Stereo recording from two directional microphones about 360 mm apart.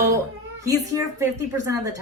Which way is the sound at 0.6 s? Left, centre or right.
Centre.